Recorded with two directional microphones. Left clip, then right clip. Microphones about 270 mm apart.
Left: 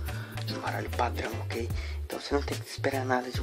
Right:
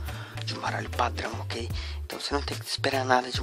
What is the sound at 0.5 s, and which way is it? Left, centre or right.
Speech, right.